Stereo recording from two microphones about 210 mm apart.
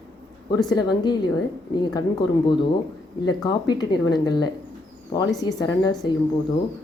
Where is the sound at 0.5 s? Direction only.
20° left (ahead or behind).